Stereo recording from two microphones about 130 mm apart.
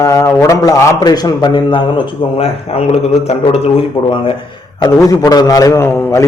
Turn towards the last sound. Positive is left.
turn(degrees=20)  # may be behind; listen again after turning